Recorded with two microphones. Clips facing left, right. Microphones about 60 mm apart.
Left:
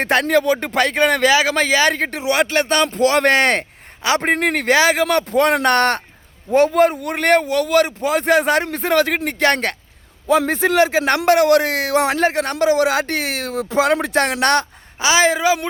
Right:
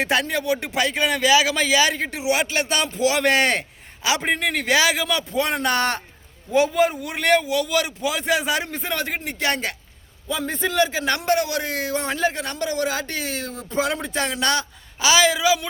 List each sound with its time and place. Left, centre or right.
0.0 s speech: left
5.0 s a man's voice: left
10.2 s a man's voice: left
14.9 s speech: left